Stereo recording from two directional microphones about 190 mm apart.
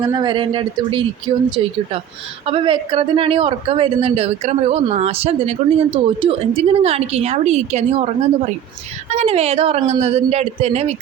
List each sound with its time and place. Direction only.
0.0 s speech: 20° right (ahead or behind)
2.5 s a woman's voice: 25° right (ahead or behind)